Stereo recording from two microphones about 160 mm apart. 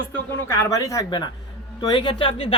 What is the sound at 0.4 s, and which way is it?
Speech, 15° left (ahead or behind).